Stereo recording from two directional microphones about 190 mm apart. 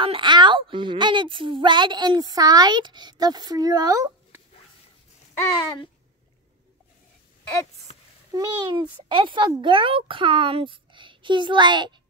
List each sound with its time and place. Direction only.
0.0 s a woman's voice: 25° right (ahead or behind)
8.3 s a woman's voice: 20° right (ahead or behind)